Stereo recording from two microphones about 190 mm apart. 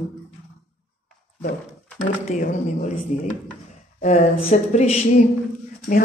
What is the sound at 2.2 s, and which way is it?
Speech, 40° left (ahead or behind).